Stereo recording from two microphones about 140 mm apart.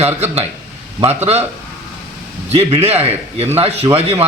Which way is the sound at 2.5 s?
45° right (ahead or behind).